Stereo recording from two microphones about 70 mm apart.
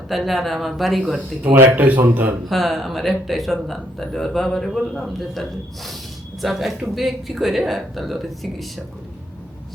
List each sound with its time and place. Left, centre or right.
0.1 s speech: centre
1.5 s speech: right
2.5 s speech: centre